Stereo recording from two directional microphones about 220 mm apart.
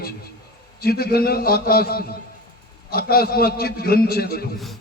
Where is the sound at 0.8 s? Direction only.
45° left (ahead or behind).